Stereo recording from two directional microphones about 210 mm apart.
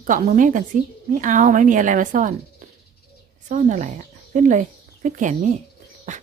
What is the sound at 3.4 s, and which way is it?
Speech, 35° right (ahead or behind).